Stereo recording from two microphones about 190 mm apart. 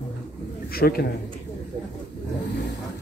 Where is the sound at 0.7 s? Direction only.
55° left (ahead or behind).